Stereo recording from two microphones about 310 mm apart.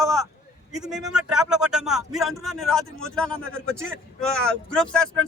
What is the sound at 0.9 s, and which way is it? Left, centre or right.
Speech, centre.